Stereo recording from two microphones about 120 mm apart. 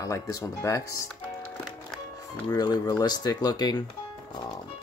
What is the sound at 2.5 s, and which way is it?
Speech, 30° left (ahead or behind).